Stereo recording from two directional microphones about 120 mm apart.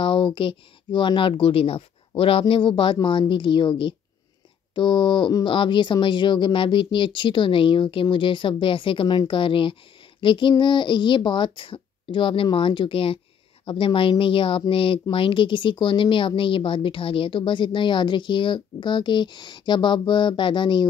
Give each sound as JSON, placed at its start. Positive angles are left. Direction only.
{"t": 0.0, "sound": "speech", "side_deg": 45}